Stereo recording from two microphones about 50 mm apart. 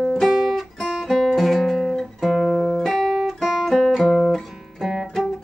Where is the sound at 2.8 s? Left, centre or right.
Centre.